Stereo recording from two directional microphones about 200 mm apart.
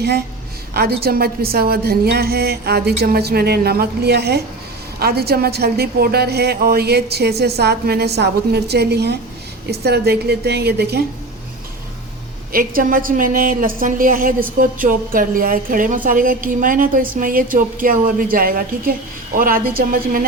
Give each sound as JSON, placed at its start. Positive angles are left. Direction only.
{"t": 1.0, "sound": "a woman's voice", "side_deg": -50}
{"t": 12.5, "sound": "a woman's voice", "side_deg": -45}